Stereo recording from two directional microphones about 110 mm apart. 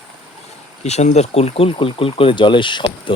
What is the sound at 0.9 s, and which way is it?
Speech, 85° left.